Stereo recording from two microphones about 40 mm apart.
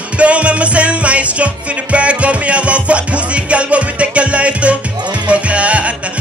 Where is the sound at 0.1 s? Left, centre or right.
Right.